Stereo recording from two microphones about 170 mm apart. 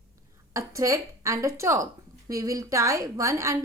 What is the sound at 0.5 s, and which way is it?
Speech, 20° right (ahead or behind).